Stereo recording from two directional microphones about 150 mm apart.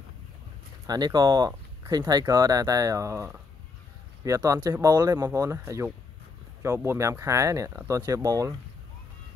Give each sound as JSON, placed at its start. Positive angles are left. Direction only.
{"t": 0.8, "sound": "speech", "side_deg": -25}